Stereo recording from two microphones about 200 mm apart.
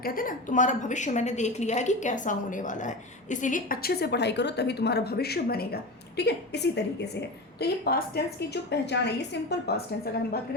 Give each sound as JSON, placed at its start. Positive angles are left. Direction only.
{"t": 0.0, "sound": "a woman's voice", "side_deg": 45}